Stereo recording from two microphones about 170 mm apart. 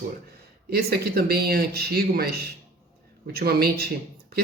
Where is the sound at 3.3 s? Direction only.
65° right (ahead or behind).